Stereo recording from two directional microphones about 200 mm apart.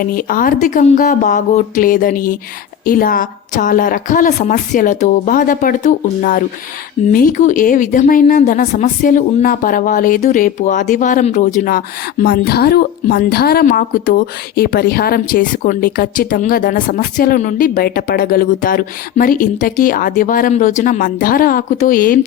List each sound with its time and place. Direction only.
0.0 s a woman's voice: 45° left (ahead or behind)